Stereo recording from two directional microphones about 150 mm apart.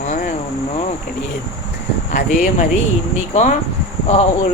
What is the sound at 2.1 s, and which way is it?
Speech, 65° left (ahead or behind).